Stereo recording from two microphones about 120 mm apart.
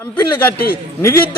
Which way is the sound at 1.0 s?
20° left (ahead or behind).